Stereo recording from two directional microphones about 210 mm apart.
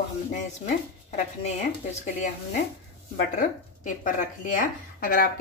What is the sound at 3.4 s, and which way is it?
Speech, 40° left (ahead or behind).